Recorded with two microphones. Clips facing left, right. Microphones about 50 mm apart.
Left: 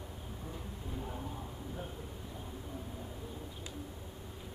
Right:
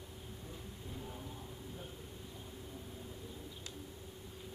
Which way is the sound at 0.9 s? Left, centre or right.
Left.